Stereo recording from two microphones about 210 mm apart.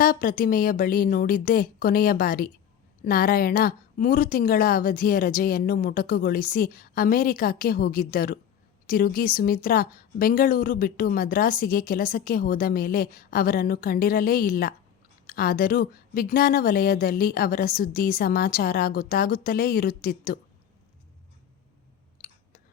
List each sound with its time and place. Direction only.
0.0 s a woman's voice: 40° left (ahead or behind)